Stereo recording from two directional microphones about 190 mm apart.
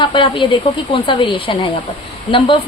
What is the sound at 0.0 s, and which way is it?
Speech, 25° left (ahead or behind).